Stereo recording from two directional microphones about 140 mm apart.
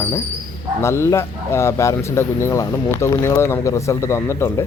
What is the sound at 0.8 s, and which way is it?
Speech, 20° left (ahead or behind).